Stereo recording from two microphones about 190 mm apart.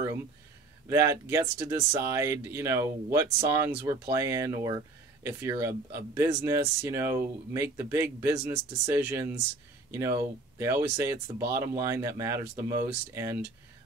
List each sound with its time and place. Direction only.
0.8 s speech: 15° right (ahead or behind)